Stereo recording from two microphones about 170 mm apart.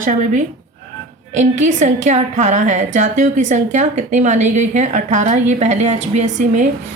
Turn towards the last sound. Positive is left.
turn(degrees=-45)  # may be behind; listen again after turning